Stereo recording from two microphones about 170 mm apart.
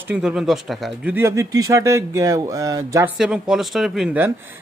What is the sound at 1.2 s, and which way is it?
Speech, 15° right (ahead or behind).